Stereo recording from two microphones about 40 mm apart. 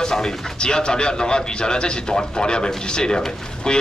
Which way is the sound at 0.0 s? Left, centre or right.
Centre.